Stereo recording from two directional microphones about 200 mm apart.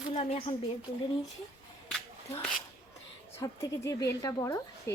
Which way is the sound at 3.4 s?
15° left (ahead or behind).